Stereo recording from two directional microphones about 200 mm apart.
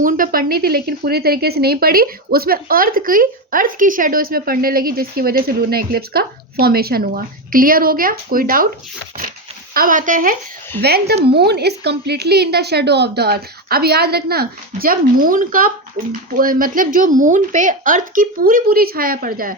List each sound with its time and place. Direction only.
0.0 s speech: 45° right (ahead or behind)
9.7 s speech: 45° right (ahead or behind)
10.8 s speech: 50° right (ahead or behind)